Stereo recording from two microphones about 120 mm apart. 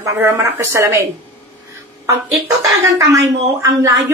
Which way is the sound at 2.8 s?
25° right (ahead or behind).